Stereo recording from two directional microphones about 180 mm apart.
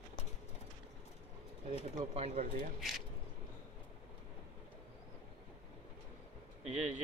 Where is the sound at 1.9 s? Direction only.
35° right (ahead or behind).